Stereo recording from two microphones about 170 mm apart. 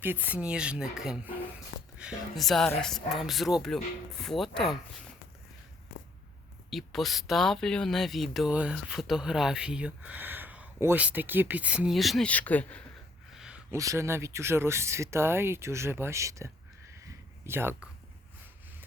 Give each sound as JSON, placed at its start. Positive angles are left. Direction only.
{"t": 0.0, "sound": "speech", "side_deg": -10}
{"t": 6.7, "sound": "speech", "side_deg": 0}
{"t": 13.3, "sound": "a sound", "side_deg": -5}
{"t": 13.7, "sound": "speech", "side_deg": -15}